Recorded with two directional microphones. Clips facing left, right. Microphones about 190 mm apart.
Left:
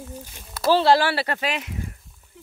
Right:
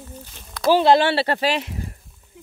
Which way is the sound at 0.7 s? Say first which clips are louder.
Right 2 dB; 20° right (ahead or behind).